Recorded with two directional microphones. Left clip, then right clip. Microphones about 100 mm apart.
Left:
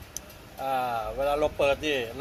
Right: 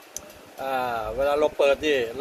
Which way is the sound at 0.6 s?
30° right (ahead or behind).